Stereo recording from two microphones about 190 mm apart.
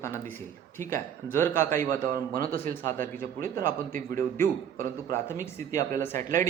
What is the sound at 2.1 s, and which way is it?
Speech, 50° right (ahead or behind).